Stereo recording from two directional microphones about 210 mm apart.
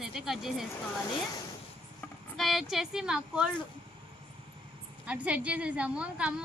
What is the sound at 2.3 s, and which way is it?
Speech, centre (ahead or behind).